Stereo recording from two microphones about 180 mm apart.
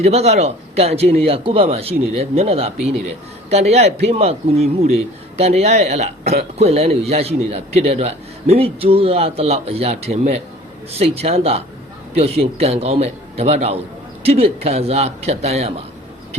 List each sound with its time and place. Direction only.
0.0 s a man's voice: 35° right (ahead or behind)